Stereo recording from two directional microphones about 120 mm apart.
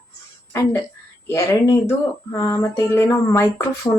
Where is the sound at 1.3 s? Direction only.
25° left (ahead or behind).